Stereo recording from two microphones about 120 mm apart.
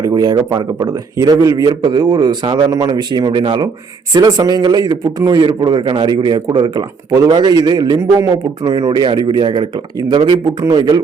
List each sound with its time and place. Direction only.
0.0 s a man's voice: 30° right (ahead or behind)